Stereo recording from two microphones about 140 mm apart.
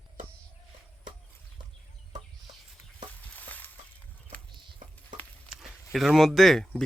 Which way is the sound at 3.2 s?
10° left (ahead or behind).